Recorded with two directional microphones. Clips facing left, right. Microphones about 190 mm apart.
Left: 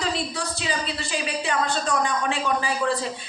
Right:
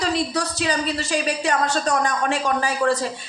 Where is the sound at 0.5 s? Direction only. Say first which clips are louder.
Right 6 dB; 45° right (ahead or behind).